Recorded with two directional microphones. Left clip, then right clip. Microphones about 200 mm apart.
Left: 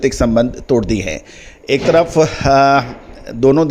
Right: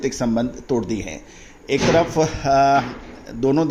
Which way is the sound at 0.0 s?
40° left (ahead or behind).